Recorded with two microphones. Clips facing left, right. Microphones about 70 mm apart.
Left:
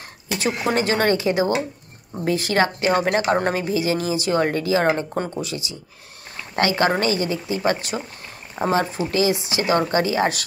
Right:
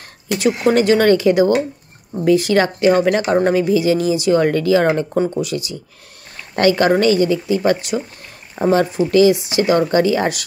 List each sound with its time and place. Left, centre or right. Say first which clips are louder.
0.4 s a woman's voice: right 7 dB; left